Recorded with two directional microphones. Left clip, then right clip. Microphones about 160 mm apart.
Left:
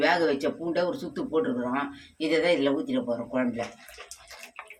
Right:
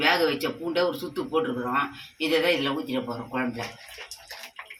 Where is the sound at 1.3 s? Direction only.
30° left (ahead or behind).